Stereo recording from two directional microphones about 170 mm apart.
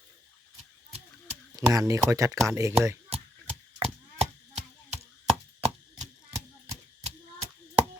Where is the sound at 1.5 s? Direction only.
20° right (ahead or behind).